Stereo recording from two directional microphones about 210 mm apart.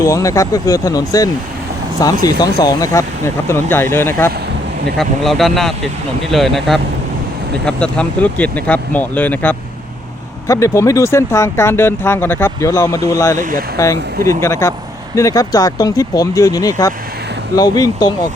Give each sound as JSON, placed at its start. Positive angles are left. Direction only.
{"t": 0.0, "sound": "a man's voice", "side_deg": 15}
{"t": 13.4, "sound": "speech", "side_deg": -40}
{"t": 13.7, "sound": "speech", "side_deg": 15}